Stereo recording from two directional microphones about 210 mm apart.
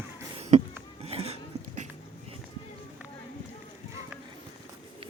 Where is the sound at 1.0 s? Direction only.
30° right (ahead or behind).